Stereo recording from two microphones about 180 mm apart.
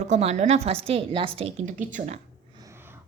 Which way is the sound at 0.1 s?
35° right (ahead or behind).